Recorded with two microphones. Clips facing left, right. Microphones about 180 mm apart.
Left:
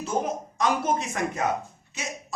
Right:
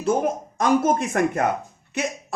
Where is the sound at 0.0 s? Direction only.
50° right (ahead or behind).